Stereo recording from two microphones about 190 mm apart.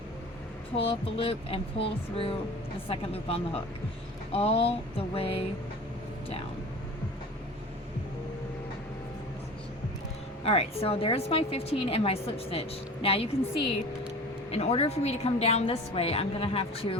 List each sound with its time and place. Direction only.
0.8 s a woman's voice: 30° left (ahead or behind)
10.4 s a woman's voice: 30° left (ahead or behind)